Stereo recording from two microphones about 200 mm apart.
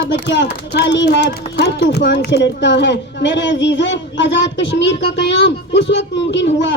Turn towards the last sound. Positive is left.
turn(degrees=65)  # may be behind; listen again after turning